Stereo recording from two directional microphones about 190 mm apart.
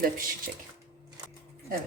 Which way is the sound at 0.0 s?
45° right (ahead or behind).